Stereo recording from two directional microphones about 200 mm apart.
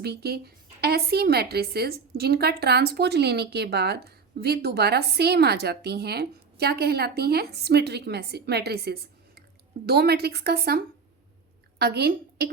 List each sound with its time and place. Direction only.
0.0 s a woman's voice: 55° right (ahead or behind)